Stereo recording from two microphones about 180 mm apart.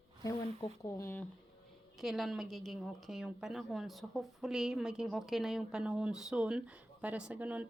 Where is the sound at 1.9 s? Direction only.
Centre (ahead or behind).